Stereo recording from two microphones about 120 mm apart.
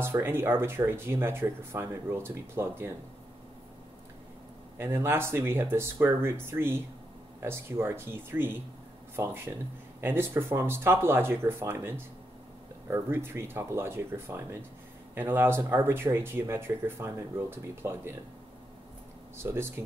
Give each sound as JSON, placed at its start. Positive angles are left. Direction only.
{"t": 0.0, "sound": "speech", "side_deg": -20}
{"t": 4.7, "sound": "speech", "side_deg": -20}
{"t": 19.3, "sound": "speech", "side_deg": -20}